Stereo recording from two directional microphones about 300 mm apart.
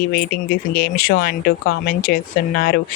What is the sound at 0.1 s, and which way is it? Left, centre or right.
Speech, left.